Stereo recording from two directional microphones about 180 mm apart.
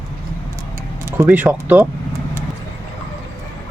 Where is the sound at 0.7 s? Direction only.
15° right (ahead or behind).